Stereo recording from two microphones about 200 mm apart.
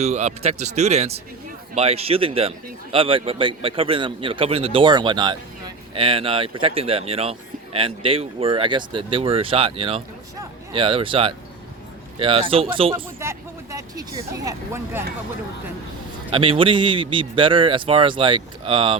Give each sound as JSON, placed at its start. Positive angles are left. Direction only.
{"t": 0.0, "sound": "a man's voice", "side_deg": -35}
{"t": 13.1, "sound": "speech", "side_deg": -15}
{"t": 16.3, "sound": "a man's voice", "side_deg": -25}